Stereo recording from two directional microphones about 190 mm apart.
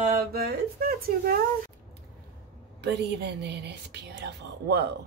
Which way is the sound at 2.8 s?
65° right (ahead or behind).